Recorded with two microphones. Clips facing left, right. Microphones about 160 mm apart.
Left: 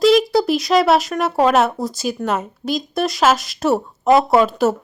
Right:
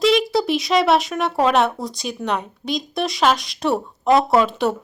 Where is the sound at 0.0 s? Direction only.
Centre (ahead or behind).